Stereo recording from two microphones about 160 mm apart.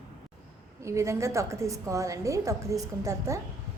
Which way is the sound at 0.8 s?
20° right (ahead or behind).